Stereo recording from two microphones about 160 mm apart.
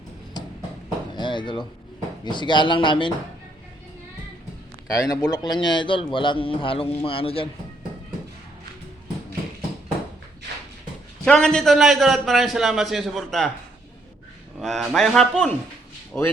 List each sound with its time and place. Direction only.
0.4 s a sound: 25° left (ahead or behind)
2.2 s speech: 30° left (ahead or behind)
4.9 s a man's voice: 20° left (ahead or behind)
11.3 s a man's voice: 5° left (ahead or behind)
14.6 s a man's voice: centre (ahead or behind)